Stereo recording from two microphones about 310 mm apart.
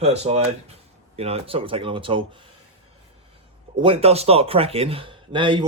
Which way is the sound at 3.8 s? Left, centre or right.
Centre.